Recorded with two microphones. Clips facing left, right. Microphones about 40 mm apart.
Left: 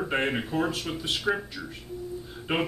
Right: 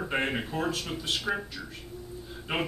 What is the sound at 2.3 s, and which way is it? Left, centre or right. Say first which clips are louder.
Music: left 3 dB; centre.